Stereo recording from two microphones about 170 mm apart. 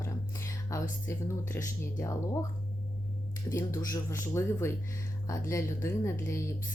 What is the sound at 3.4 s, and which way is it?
Speech, 20° left (ahead or behind).